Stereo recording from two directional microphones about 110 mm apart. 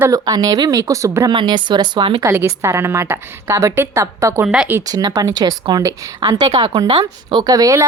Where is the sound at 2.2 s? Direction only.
25° right (ahead or behind).